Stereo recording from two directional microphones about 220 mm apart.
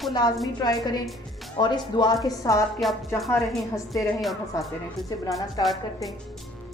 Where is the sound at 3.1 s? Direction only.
Centre (ahead or behind).